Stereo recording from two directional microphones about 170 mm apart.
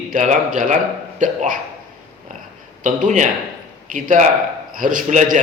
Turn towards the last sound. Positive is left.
turn(degrees=-45)  # may be behind; listen again after turning